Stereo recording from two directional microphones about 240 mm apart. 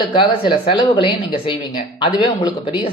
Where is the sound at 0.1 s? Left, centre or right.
Left.